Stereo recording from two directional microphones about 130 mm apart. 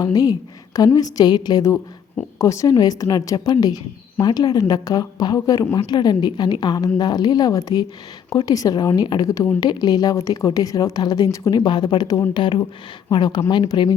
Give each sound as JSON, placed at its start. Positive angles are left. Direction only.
{"t": 0.0, "sound": "speech", "side_deg": 30}